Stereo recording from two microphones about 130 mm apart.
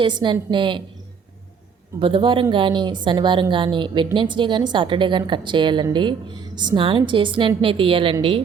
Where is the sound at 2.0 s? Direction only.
40° right (ahead or behind).